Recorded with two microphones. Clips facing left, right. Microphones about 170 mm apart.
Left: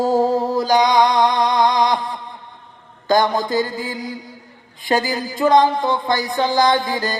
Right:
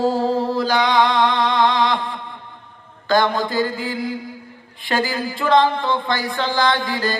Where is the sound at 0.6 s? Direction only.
15° left (ahead or behind).